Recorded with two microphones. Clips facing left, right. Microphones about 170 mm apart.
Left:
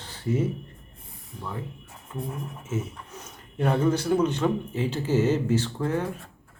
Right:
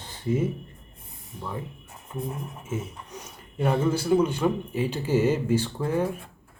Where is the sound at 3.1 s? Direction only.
5° right (ahead or behind).